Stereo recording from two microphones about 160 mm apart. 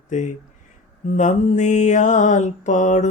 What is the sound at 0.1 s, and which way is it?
Mantra, 50° left (ahead or behind).